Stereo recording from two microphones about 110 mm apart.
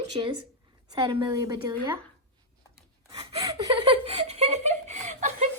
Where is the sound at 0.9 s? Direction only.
45° right (ahead or behind).